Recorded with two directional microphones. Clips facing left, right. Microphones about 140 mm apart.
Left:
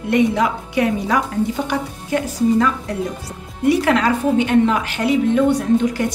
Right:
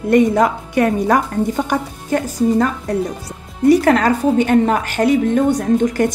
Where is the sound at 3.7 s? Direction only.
45° right (ahead or behind).